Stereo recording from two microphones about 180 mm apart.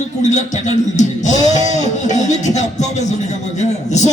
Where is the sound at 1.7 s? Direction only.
40° left (ahead or behind).